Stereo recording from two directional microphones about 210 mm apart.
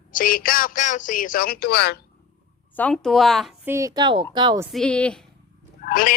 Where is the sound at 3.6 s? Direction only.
15° right (ahead or behind).